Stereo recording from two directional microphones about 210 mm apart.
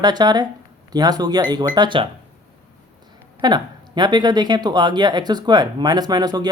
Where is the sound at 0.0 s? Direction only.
20° right (ahead or behind).